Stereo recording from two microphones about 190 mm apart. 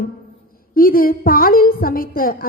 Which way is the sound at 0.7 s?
50° left (ahead or behind).